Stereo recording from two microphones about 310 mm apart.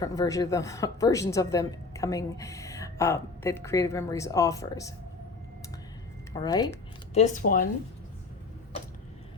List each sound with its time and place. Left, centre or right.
0.0 s a woman's voice: centre
6.3 s a woman's voice: centre